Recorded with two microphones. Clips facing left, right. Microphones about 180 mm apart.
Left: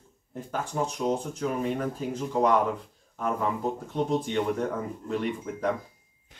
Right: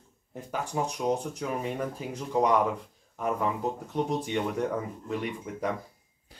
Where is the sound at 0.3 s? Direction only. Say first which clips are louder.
Left 1 dB; 10° right (ahead or behind).